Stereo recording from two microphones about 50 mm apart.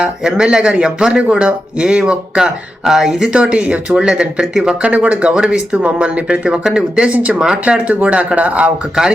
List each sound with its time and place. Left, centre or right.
0.0 s speech: centre
4.8 s speech: right
7.1 s speech: right
7.3 s speech: centre
7.6 s speech: right
9.0 s speech: centre